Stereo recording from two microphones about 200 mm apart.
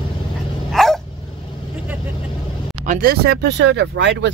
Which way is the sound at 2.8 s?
45° right (ahead or behind).